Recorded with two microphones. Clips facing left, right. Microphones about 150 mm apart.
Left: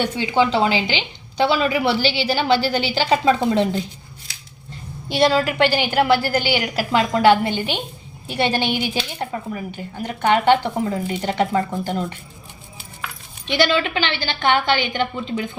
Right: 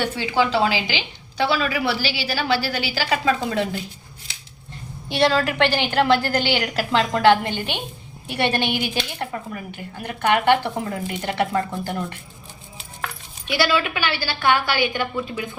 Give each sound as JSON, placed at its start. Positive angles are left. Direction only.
{"t": 0.0, "sound": "a woman's voice", "side_deg": 20}
{"t": 5.0, "sound": "a woman's voice", "side_deg": 15}
{"t": 13.5, "sound": "a woman's voice", "side_deg": 25}